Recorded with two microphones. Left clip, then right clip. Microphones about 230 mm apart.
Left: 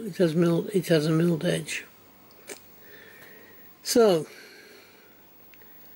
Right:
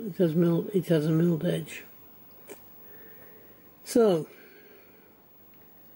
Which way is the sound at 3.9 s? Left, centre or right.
Centre.